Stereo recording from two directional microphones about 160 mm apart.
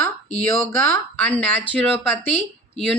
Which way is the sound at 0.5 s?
15° left (ahead or behind).